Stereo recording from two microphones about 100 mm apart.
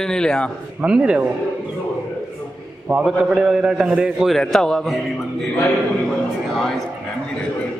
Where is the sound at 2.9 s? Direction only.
10° right (ahead or behind).